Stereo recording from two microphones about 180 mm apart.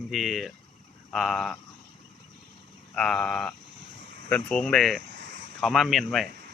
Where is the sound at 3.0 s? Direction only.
5° left (ahead or behind).